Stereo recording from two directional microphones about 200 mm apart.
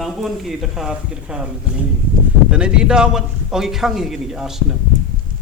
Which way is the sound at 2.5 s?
5° right (ahead or behind).